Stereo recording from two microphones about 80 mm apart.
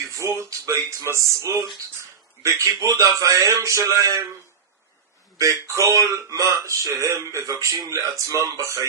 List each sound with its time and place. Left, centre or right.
0.2 s speech: right
5.4 s speech: right